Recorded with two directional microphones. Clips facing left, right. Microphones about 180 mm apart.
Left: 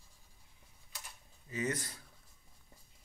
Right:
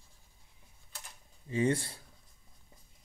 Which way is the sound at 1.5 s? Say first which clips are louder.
Right 7 dB; 30° right (ahead or behind).